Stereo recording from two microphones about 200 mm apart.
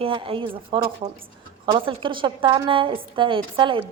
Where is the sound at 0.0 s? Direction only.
25° right (ahead or behind).